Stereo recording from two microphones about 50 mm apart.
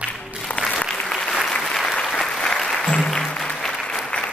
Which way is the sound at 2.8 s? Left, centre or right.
Centre.